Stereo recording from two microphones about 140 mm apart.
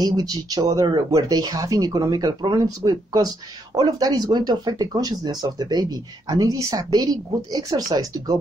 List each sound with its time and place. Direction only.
0.0 s speech: 30° right (ahead or behind)